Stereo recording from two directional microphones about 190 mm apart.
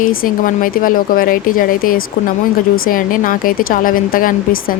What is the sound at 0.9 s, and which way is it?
Speech, 45° left (ahead or behind).